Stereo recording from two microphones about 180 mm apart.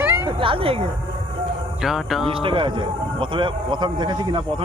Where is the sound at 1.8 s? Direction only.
Centre (ahead or behind).